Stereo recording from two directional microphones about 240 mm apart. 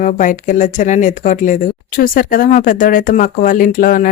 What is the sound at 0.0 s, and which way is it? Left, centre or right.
Speech, left.